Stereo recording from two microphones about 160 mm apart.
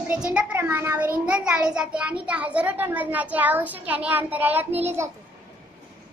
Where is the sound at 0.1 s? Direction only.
5° right (ahead or behind).